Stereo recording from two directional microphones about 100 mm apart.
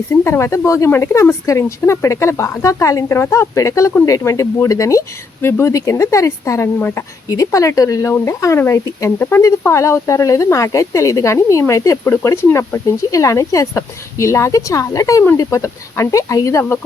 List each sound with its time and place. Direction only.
0.1 s speech: 25° left (ahead or behind)
7.3 s speech: 35° left (ahead or behind)
9.1 s speech: 20° left (ahead or behind)
9.4 s speech: 30° left (ahead or behind)